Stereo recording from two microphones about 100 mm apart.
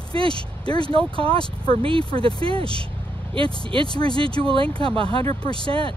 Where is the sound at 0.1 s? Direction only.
65° right (ahead or behind).